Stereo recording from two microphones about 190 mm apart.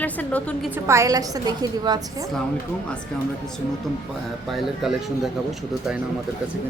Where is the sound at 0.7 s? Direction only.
15° right (ahead or behind).